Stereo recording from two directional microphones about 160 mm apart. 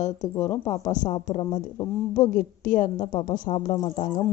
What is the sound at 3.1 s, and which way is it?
Speech, 25° left (ahead or behind).